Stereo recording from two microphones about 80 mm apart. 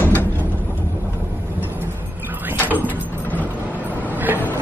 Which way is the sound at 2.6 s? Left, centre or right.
Right.